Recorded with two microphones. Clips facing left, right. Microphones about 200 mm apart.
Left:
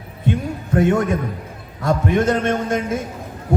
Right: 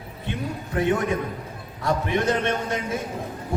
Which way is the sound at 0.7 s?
50° left (ahead or behind).